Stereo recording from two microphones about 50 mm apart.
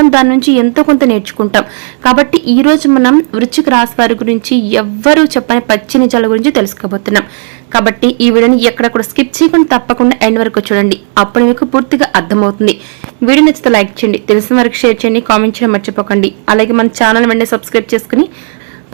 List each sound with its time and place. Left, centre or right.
0.3 s a woman's voice: centre
2.1 s speech: right
2.6 s a woman's voice: centre
3.7 s a woman's voice: right; by 12.5 s centre
13.5 s speech: right
14.7 s speech: right
15.1 s a woman's voice: centre
15.5 s speech: right
16.9 s a woman's voice: right
17.2 s speech: right